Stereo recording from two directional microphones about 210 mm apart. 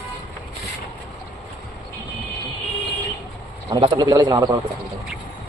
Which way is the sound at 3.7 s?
25° right (ahead or behind).